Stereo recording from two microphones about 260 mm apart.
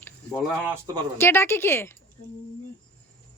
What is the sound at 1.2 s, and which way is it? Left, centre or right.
Speech, centre.